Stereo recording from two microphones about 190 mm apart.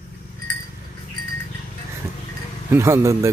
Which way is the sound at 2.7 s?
15° right (ahead or behind).